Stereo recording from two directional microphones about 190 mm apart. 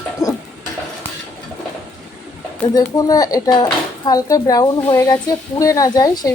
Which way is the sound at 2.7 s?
20° left (ahead or behind).